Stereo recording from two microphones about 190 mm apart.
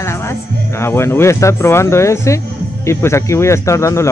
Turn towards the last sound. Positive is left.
turn(degrees=15)  # may be behind; listen again after turning